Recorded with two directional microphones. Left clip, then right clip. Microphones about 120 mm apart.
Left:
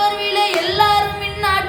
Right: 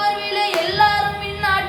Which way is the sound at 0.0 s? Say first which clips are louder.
Left 3 dB; 35° left (ahead or behind).